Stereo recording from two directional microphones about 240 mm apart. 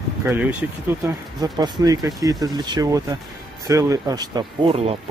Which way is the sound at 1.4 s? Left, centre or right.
Centre.